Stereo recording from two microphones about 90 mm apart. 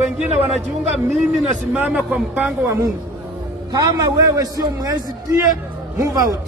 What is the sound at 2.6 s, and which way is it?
Speech, 35° right (ahead or behind).